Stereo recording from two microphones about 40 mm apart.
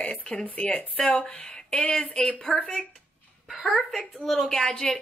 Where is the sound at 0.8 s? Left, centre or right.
Left.